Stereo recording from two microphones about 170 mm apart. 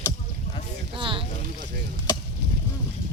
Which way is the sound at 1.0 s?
30° right (ahead or behind).